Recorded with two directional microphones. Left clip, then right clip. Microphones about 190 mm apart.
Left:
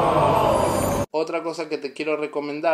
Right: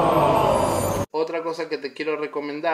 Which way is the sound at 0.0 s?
Centre (ahead or behind).